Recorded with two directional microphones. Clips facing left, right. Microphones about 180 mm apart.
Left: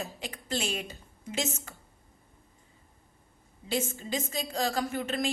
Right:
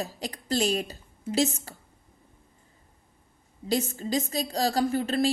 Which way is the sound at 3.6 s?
35° right (ahead or behind).